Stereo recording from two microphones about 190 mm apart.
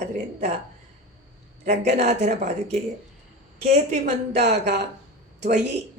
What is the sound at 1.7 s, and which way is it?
Speech, 60° right (ahead or behind).